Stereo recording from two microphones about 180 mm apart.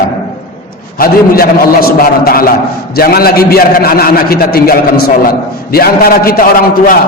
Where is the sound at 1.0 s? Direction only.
55° left (ahead or behind).